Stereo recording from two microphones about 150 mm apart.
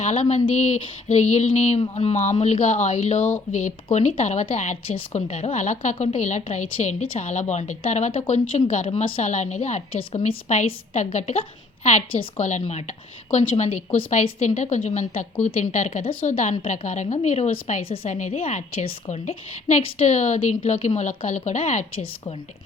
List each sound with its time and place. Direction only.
0.0 s a woman's voice: 45° left (ahead or behind)